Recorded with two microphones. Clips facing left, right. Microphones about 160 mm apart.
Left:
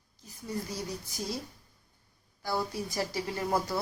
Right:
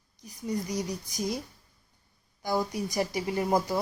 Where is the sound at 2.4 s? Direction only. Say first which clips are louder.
Right 4 dB; 15° right (ahead or behind).